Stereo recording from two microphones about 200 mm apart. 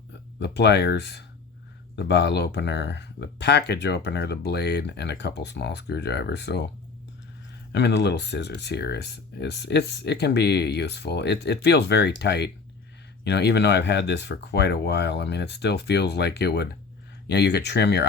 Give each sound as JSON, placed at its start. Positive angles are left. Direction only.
{"t": 0.3, "sound": "speech", "side_deg": 60}
{"t": 7.7, "sound": "speech", "side_deg": 60}